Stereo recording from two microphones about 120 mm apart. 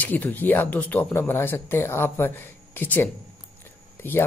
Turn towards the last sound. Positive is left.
turn(degrees=20)  # may be behind; listen again after turning